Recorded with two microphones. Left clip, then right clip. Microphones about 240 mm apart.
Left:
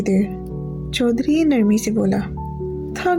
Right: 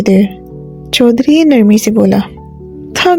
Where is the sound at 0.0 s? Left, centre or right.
Right.